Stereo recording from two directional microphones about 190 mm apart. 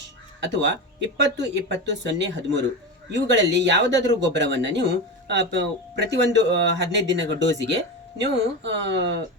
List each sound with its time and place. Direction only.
0.5 s speech: 70° right (ahead or behind)